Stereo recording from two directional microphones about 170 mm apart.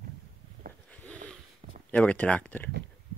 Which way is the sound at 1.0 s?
10° left (ahead or behind).